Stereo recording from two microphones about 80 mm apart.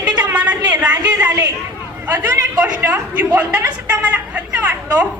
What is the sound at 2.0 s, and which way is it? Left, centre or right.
Speech, right.